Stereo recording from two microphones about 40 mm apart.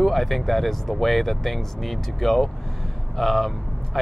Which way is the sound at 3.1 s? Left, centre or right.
Centre.